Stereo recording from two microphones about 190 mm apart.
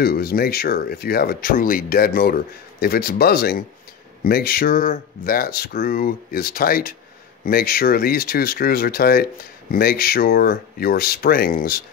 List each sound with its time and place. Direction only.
0.0 s speech: 55° left (ahead or behind)